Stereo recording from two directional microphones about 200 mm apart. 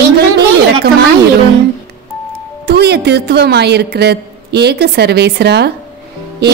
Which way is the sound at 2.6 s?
55° right (ahead or behind).